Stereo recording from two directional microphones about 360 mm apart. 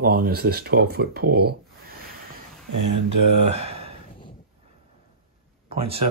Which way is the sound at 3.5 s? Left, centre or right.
Centre.